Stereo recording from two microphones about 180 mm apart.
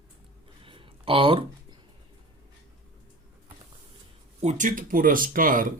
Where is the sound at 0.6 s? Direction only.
30° right (ahead or behind).